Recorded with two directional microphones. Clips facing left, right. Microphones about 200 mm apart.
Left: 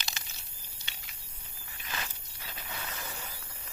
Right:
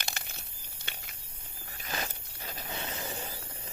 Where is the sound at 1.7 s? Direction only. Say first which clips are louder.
Right 4 dB; 40° right (ahead or behind).